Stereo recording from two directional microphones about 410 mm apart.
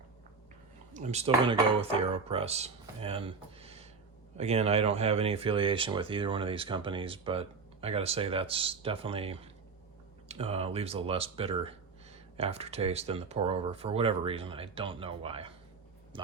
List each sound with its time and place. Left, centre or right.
0.9 s speech: centre